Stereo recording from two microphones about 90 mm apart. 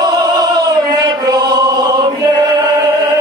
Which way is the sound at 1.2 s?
50° right (ahead or behind).